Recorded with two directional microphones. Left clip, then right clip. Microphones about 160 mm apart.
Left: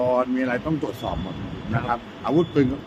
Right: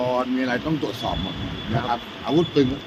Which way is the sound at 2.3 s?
20° left (ahead or behind).